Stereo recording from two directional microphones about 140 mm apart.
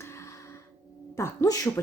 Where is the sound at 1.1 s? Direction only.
20° left (ahead or behind).